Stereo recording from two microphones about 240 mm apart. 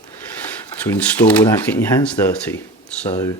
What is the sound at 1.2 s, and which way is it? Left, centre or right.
Speech, centre.